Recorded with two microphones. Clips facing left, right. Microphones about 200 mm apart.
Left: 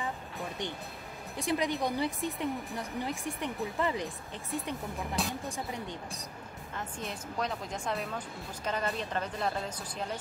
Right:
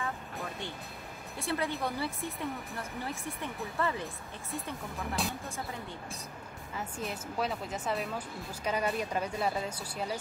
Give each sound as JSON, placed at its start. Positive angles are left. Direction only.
{"t": 1.4, "sound": "speech", "side_deg": 15}
{"t": 5.2, "sound": "speech", "side_deg": 0}
{"t": 6.7, "sound": "speech", "side_deg": -5}